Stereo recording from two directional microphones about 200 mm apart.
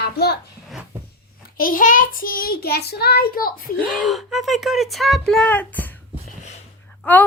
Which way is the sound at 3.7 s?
5° right (ahead or behind).